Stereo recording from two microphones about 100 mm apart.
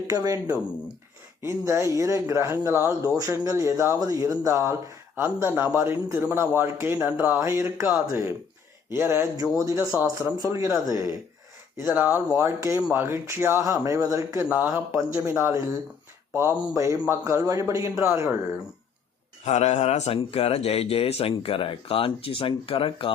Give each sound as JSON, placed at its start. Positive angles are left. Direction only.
{"t": 0.1, "sound": "a man's voice", "side_deg": -35}
{"t": 11.8, "sound": "speech", "side_deg": -20}
{"t": 14.4, "sound": "speech", "side_deg": -15}
{"t": 15.1, "sound": "speech", "side_deg": -30}
{"t": 19.8, "sound": "speech", "side_deg": 90}